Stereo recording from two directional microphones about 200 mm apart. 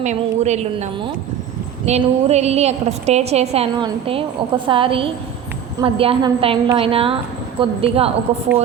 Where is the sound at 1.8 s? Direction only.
35° right (ahead or behind).